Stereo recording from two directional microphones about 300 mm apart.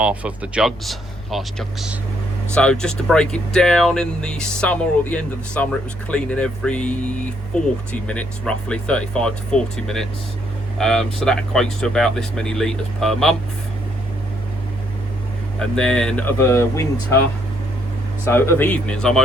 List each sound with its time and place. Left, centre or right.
0.0 s speech: centre
15.5 s speech: centre
18.3 s speech: centre